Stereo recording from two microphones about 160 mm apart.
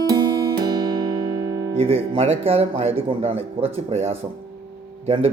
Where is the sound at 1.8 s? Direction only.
35° right (ahead or behind).